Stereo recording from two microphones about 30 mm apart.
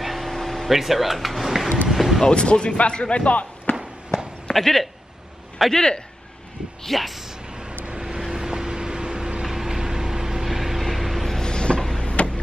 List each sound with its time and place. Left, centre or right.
0.0 s a sound: centre
0.7 s speech: centre
1.9 s a sound: centre
2.2 s speech: left
3.3 s speech: left
4.6 s speech: centre
5.7 s a man's voice: left
6.8 s speech: centre
7.9 s vehicle: right; by 11.3 s centre
11.4 s a sound: left
12.0 s vehicle: left